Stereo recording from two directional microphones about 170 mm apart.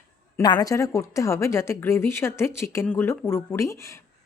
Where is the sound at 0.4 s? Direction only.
25° left (ahead or behind).